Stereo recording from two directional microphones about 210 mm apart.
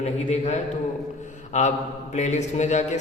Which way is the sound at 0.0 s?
35° left (ahead or behind).